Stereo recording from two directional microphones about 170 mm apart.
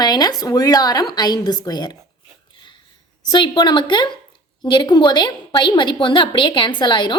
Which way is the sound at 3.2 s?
25° left (ahead or behind).